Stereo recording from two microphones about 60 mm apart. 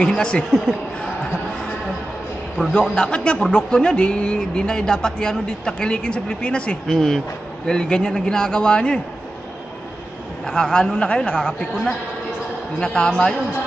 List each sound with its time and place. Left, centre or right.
0.0 s speech: centre
2.8 s speech: centre
6.9 s speech: centre
10.4 s speech: centre